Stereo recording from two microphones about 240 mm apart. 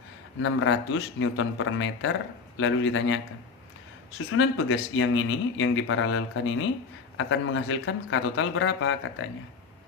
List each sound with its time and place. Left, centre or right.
0.4 s speech: left
4.3 s speech: left